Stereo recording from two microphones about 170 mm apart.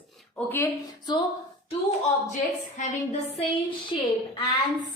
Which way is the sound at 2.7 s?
40° left (ahead or behind).